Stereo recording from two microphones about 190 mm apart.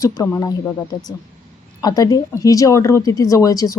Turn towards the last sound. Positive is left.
turn(degrees=20)  # may be behind; listen again after turning